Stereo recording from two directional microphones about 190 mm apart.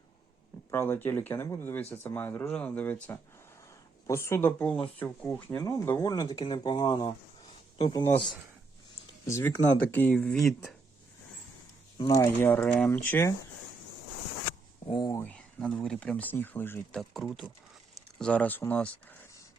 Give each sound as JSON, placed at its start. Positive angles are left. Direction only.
{"t": 0.7, "sound": "speech", "side_deg": 10}
{"t": 9.2, "sound": "speech", "side_deg": 15}
{"t": 12.1, "sound": "speech", "side_deg": 15}
{"t": 14.8, "sound": "speech", "side_deg": 25}
{"t": 15.2, "sound": "speech", "side_deg": 5}
{"t": 17.9, "sound": "a sound", "side_deg": 5}